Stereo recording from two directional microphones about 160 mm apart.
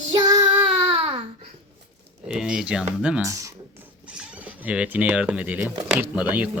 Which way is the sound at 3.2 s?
20° right (ahead or behind).